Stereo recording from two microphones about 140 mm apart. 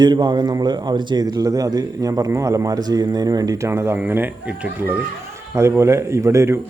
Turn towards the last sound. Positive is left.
turn(degrees=-20)  # may be behind; listen again after turning